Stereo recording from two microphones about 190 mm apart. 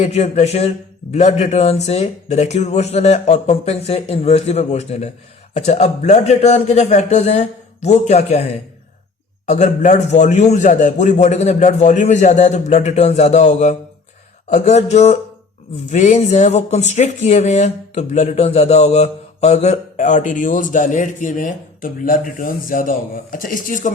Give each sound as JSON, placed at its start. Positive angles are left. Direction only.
{"t": 0.0, "sound": "speech", "side_deg": 35}
{"t": 9.5, "sound": "speech", "side_deg": 40}